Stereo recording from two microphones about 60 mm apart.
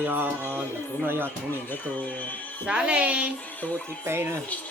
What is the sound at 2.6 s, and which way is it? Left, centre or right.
Speech, centre.